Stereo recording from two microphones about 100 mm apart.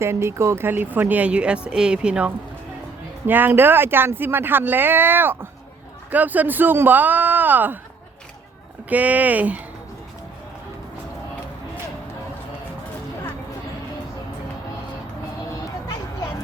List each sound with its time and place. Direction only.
0.0 s speech: 25° right (ahead or behind)
8.9 s speech: 15° right (ahead or behind)